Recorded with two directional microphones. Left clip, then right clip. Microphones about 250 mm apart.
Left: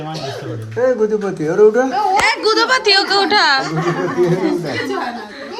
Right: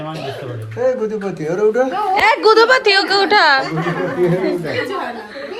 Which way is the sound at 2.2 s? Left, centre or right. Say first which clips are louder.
Right 8 dB; centre.